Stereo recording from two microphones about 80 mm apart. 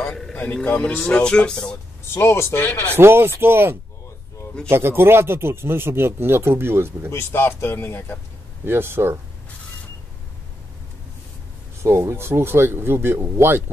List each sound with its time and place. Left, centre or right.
0.0 s a sound: centre
0.4 s speech: centre
2.1 s speech: left
3.0 s speech: right
7.1 s speech: left
8.6 s speech: right
11.8 s speech: right